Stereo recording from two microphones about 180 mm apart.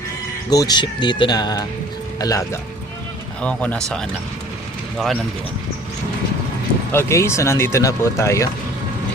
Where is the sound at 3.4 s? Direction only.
5° left (ahead or behind).